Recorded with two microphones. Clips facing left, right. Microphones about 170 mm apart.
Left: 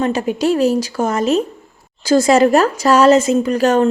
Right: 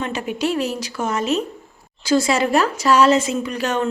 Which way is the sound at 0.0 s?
40° left (ahead or behind).